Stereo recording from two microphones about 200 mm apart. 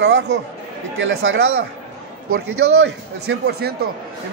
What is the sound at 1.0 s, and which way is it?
Speech, 75° right (ahead or behind).